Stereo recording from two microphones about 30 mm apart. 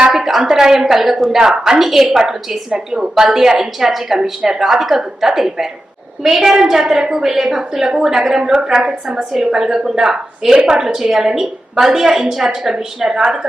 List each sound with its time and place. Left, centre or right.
0.1 s a sound: centre
0.5 s a woman's voice: centre
1.4 s speech: centre
1.8 s a woman's voice: centre
2.7 s speech: right
3.2 s a woman's voice: centre
8.8 s a woman's voice: right